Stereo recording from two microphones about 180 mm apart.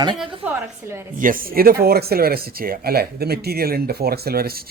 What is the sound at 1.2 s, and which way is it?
Speech, 55° right (ahead or behind).